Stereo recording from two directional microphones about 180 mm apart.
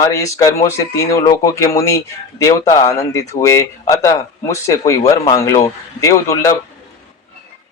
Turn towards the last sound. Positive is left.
turn(degrees=15)  # may be behind; listen again after turning